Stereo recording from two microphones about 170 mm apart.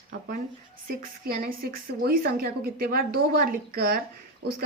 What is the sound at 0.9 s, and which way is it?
Speech, 55° right (ahead or behind).